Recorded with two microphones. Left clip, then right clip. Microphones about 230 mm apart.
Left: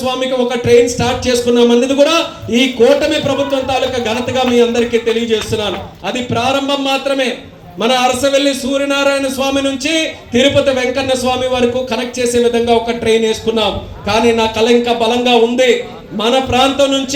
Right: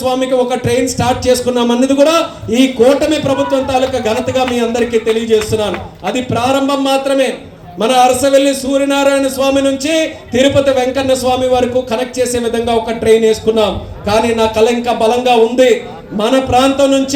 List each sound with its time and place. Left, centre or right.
0.0 s a man's voice: right